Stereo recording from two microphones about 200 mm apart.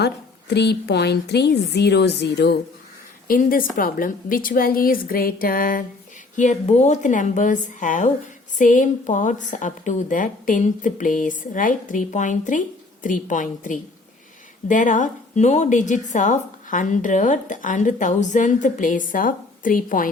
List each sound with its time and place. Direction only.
0.0 s a woman's voice: 55° left (ahead or behind)
3.2 s a woman's voice: 45° left (ahead or behind)